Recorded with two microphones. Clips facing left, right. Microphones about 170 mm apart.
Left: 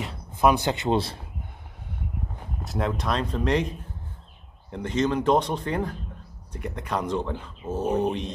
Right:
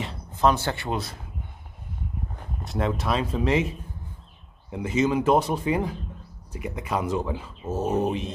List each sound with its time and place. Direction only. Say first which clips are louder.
0.4 s speech: left 1 dB; 15° left (ahead or behind); by 1.2 s 30° left (ahead or behind)
2.6 s speech: right 1 dB; centre (ahead or behind)